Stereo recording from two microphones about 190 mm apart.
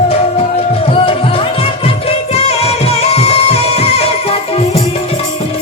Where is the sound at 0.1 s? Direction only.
30° left (ahead or behind).